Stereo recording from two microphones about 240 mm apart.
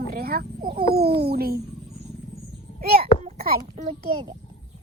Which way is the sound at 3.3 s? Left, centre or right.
Right.